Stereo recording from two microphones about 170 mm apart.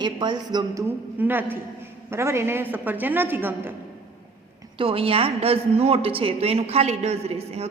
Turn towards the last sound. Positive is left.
turn(degrees=-35)  # may be behind; listen again after turning